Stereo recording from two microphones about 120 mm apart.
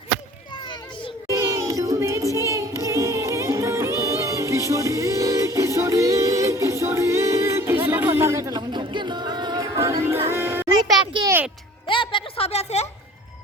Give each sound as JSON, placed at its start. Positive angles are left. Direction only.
{"t": 0.6, "sound": "children playing", "side_deg": 40}
{"t": 1.3, "sound": "music", "side_deg": -25}
{"t": 8.5, "sound": "music", "side_deg": -40}
{"t": 10.7, "sound": "music", "side_deg": -35}
{"t": 11.9, "sound": "a sound", "side_deg": 45}